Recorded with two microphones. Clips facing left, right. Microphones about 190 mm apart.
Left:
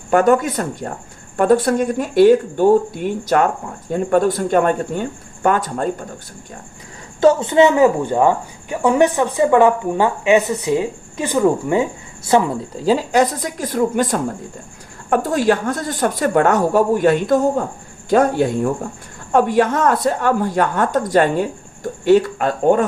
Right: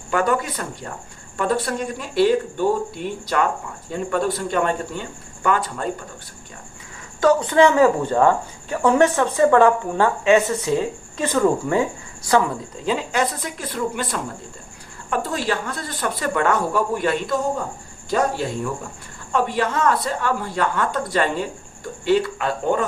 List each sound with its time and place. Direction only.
0.1 s speech: 45° left (ahead or behind)
7.2 s speech: 25° left (ahead or behind)
12.8 s speech: 35° left (ahead or behind)